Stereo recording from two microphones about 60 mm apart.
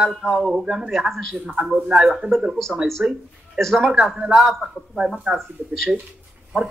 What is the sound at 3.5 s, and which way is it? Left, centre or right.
A man's voice, centre.